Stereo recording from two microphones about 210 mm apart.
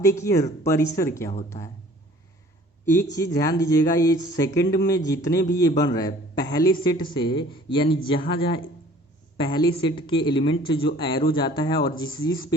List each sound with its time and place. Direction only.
0.0 s speech: 15° left (ahead or behind)
1.5 s a man's voice: 25° left (ahead or behind)
2.8 s a man's voice: 10° left (ahead or behind)